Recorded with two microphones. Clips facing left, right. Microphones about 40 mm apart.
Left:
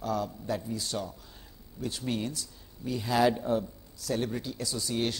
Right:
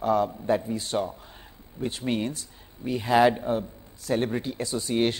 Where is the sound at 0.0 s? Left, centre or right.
Right.